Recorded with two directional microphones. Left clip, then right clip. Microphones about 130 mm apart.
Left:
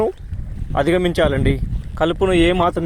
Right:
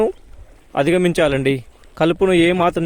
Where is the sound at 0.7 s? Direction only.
50° right (ahead or behind).